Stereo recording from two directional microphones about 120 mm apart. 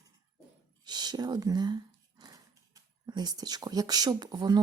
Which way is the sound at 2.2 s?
35° right (ahead or behind).